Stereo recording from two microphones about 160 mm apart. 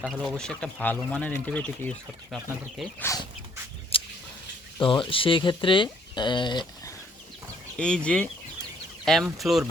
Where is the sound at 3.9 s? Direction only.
35° left (ahead or behind).